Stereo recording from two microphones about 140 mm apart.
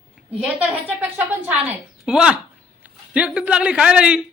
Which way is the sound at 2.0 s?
5° right (ahead or behind).